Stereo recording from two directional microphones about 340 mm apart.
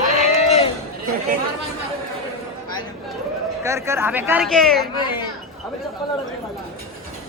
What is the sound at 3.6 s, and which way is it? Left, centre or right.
Speech, centre.